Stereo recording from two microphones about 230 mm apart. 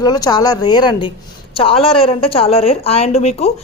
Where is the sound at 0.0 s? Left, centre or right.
Centre.